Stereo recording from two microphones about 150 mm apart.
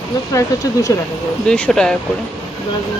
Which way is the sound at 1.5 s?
5° left (ahead or behind).